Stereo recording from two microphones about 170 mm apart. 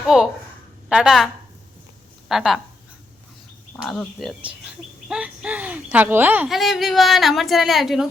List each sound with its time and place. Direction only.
0.0 s a woman's voice: 5° right (ahead or behind)
2.3 s speech: centre (ahead or behind)
3.8 s speech: centre (ahead or behind)